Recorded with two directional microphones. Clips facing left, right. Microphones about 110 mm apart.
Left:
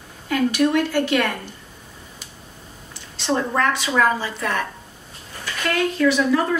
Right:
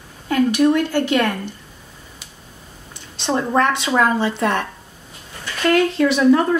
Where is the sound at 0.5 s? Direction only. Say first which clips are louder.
Right 2 dB; 20° right (ahead or behind).